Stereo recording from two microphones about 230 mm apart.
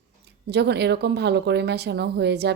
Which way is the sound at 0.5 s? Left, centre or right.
Right.